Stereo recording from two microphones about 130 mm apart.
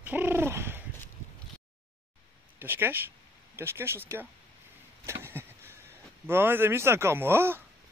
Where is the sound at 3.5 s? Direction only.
20° right (ahead or behind).